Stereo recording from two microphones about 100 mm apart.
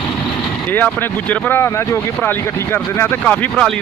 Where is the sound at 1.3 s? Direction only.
20° left (ahead or behind).